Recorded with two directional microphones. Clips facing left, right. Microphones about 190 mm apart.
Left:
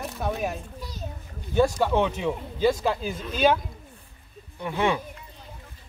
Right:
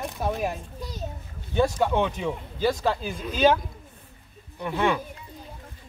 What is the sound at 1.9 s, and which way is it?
Speech, 5° left (ahead or behind).